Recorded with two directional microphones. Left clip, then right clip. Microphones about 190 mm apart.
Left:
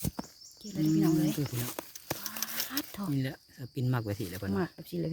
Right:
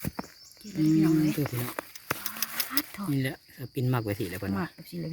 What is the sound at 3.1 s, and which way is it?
Speech, 5° right (ahead or behind).